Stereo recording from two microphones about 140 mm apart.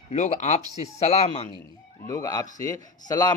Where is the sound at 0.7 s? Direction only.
50° left (ahead or behind).